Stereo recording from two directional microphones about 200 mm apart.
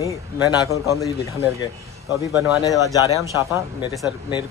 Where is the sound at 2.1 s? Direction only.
15° right (ahead or behind).